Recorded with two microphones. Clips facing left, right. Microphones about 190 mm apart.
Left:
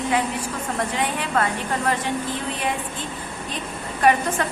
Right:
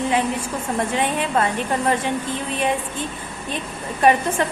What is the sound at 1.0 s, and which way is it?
Speech, 20° right (ahead or behind).